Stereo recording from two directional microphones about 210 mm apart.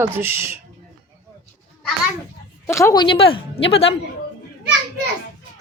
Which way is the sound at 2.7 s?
15° left (ahead or behind).